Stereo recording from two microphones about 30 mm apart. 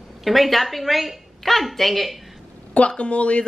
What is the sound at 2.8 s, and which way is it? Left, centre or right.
Speech, left.